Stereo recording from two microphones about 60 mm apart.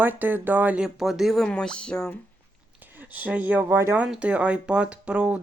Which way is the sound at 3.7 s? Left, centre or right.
Right.